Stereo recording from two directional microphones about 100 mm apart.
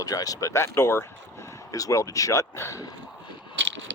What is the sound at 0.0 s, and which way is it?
Speech, 40° left (ahead or behind).